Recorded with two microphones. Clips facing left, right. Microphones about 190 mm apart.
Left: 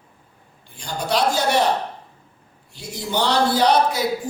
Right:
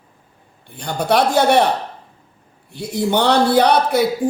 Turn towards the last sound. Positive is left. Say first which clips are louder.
# right 4 dB
turn(degrees=-60)  # may be behind; listen again after turning